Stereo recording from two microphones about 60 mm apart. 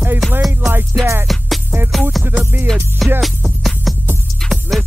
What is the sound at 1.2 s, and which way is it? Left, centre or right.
Music, centre.